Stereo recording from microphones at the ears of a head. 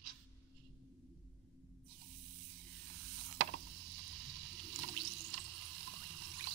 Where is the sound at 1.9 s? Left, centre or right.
Right.